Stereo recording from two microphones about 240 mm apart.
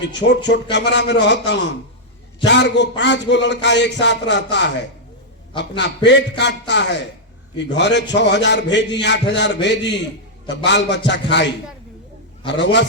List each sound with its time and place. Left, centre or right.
0.2 s a man's voice: left
6.1 s a man's voice: left